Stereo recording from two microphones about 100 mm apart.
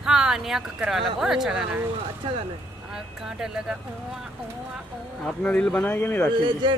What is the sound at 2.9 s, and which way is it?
Speech, 5° right (ahead or behind).